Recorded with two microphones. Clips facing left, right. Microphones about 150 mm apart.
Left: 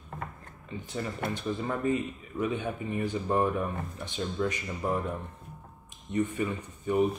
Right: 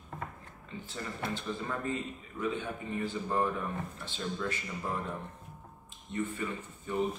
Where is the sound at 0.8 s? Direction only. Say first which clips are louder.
Left 5 dB; 15° left (ahead or behind).